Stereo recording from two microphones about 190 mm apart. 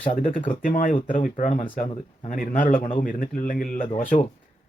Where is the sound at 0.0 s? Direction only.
40° left (ahead or behind).